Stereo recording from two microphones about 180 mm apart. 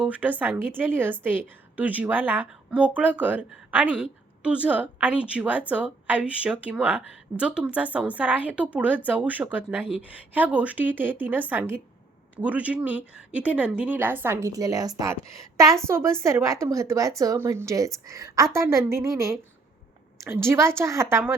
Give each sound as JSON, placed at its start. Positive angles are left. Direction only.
{"t": 0.0, "sound": "a woman's voice", "side_deg": -10}